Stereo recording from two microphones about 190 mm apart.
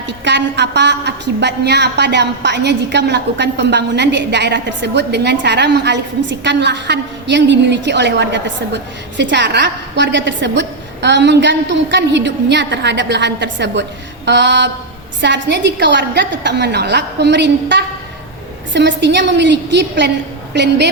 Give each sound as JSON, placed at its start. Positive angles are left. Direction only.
{"t": 0.3, "sound": "a woman's voice", "side_deg": -65}